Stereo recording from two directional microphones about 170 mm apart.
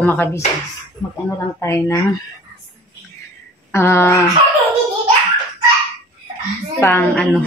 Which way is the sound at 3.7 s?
15° left (ahead or behind).